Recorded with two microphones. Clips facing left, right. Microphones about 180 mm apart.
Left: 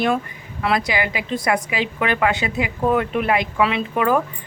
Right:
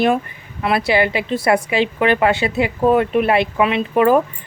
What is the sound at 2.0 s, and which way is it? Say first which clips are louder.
Speech: right 3 dB; 30° right (ahead or behind).